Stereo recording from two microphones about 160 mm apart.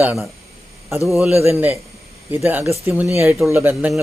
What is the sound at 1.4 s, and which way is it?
A man's voice, 15° right (ahead or behind).